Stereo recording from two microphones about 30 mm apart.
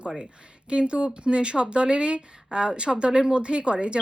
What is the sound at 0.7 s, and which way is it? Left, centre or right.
A woman's voice, right.